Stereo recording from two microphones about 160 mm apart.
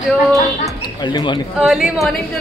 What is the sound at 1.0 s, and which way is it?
Speech, 30° left (ahead or behind).